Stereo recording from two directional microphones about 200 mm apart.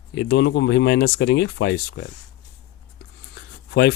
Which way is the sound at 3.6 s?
55° left (ahead or behind).